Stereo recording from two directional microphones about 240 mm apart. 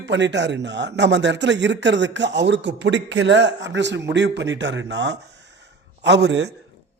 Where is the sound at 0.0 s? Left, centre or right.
Right.